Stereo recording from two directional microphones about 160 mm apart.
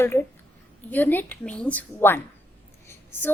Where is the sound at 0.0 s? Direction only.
15° left (ahead or behind).